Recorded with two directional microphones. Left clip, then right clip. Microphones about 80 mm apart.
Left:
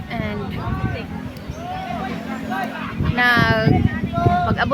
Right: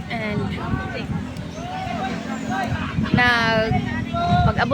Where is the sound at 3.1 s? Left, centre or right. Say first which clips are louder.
Left 1 dB; left.